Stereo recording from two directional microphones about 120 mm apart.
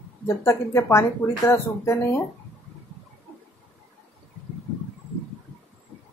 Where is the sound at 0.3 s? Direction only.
25° left (ahead or behind).